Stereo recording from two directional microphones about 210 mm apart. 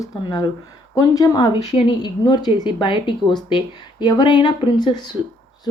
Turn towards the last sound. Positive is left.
turn(degrees=20)  # may be behind; listen again after turning